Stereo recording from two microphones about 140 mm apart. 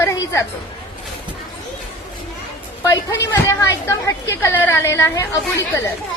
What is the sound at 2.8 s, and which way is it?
A woman's voice, 25° left (ahead or behind).